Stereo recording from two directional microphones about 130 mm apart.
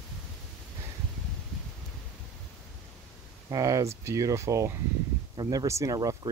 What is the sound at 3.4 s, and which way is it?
Speech, 25° right (ahead or behind).